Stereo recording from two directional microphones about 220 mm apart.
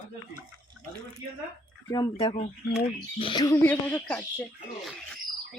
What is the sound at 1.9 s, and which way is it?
Speech, 15° left (ahead or behind).